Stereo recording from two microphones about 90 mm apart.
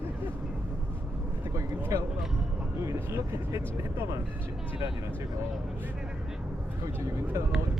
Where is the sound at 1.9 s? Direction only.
35° right (ahead or behind).